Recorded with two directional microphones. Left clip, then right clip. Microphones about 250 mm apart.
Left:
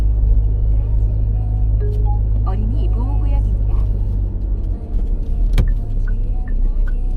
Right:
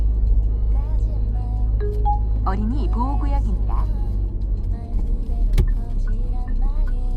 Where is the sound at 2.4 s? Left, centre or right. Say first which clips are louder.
Even; centre.